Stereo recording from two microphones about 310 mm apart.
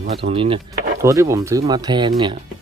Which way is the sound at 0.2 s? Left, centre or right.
Centre.